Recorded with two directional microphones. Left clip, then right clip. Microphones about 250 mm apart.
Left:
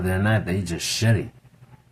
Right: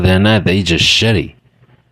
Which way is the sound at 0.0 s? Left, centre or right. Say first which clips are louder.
Right 12 dB; right.